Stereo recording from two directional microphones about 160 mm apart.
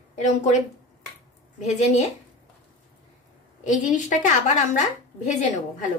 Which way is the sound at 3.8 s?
50° left (ahead or behind).